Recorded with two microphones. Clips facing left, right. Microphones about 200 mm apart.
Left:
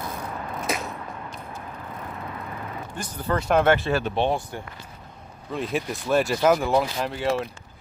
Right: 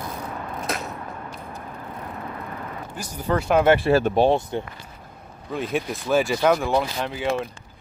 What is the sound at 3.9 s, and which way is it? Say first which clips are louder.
Speech: right 6 dB; 40° right (ahead or behind).